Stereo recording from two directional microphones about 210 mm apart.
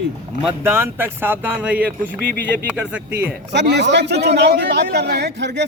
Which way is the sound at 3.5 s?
55° right (ahead or behind).